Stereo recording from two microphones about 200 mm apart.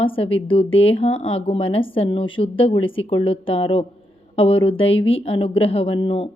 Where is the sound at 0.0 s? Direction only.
25° left (ahead or behind).